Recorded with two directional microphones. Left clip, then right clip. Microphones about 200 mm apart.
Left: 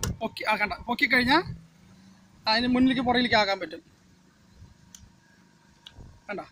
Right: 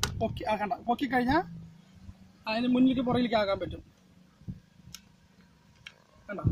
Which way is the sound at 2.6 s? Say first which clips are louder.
Left 2 dB; 10° left (ahead or behind).